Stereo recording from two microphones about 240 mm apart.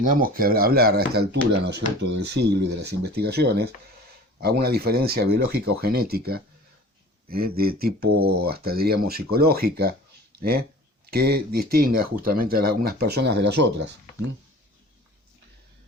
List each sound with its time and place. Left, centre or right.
0.0 s speech: right